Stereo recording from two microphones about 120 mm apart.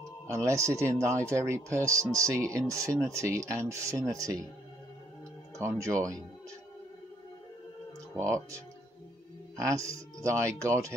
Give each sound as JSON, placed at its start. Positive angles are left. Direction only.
{"t": 0.3, "sound": "speech", "side_deg": -25}
{"t": 5.6, "sound": "speech", "side_deg": -25}
{"t": 8.2, "sound": "speech", "side_deg": -25}